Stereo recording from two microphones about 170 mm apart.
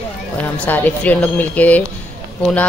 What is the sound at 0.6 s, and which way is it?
Speech, 10° left (ahead or behind).